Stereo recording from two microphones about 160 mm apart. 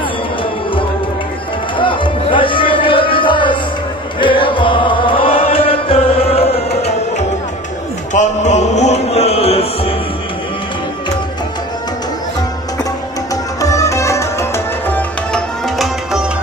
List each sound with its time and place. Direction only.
1.8 s music: 30° left (ahead or behind)
13.6 s music: 20° left (ahead or behind)
15.8 s music: 5° right (ahead or behind)